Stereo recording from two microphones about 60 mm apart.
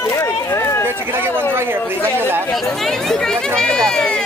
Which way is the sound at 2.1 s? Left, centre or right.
Right.